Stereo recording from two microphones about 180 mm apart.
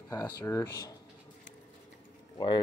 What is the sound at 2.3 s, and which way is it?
Speech, 25° left (ahead or behind).